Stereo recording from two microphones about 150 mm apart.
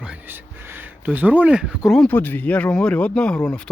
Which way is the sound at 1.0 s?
10° right (ahead or behind).